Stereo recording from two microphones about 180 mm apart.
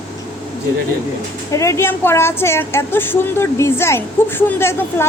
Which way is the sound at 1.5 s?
15° left (ahead or behind).